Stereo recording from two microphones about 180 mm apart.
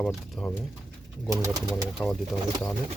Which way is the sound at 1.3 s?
20° right (ahead or behind).